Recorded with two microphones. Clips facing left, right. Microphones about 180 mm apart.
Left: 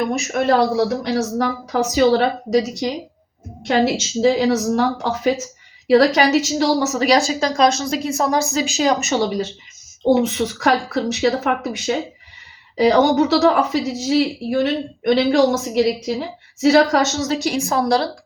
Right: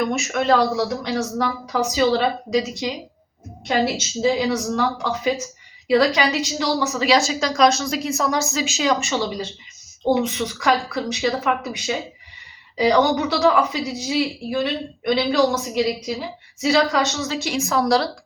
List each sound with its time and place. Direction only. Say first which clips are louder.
0.0 s a woman's voice: left 2 dB; 35° left (ahead or behind)
0.4 s a woman's voice: left 3 dB; 50° left (ahead or behind)
4.2 s a woman's voice: left 4 dB; 50° left (ahead or behind); by 18.1 s 30° left (ahead or behind)